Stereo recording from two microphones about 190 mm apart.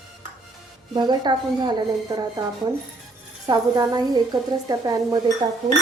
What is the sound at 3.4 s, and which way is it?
A woman's voice, 20° right (ahead or behind).